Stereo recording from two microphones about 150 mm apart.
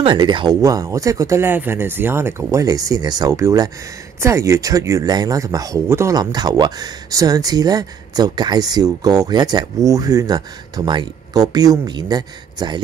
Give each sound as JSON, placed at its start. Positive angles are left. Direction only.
{"t": 0.0, "sound": "speech", "side_deg": -30}